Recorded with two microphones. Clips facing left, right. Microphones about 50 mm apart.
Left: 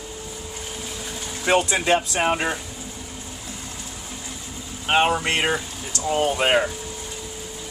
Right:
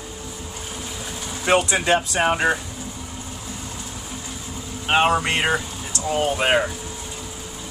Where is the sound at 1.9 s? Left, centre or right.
Centre.